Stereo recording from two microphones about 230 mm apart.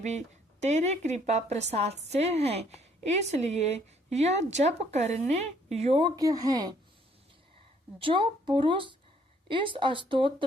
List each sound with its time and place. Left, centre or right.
0.6 s a woman's voice: right
7.9 s a woman's voice: right